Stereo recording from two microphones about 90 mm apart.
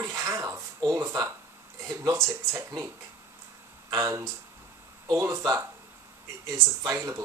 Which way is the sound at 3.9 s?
35° right (ahead or behind).